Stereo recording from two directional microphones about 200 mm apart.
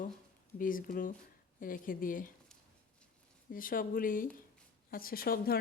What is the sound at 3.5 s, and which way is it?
Speech, 45° left (ahead or behind).